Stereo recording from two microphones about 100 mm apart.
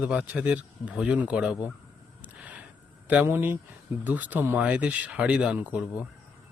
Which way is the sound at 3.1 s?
20° right (ahead or behind).